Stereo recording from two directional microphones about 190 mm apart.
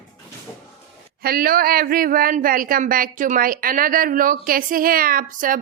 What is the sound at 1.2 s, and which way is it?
Speech, 50° right (ahead or behind).